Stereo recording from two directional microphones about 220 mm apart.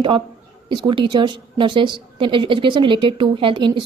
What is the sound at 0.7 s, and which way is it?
Speech, 20° right (ahead or behind).